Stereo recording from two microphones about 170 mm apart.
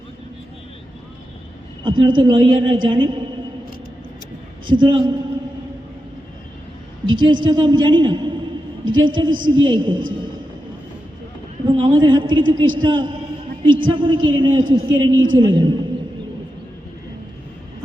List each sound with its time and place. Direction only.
1.8 s a man's voice: 30° right (ahead or behind)
4.6 s a man's voice: 25° right (ahead or behind)
7.1 s a man's voice: 25° right (ahead or behind)
11.7 s a man's voice: 30° right (ahead or behind)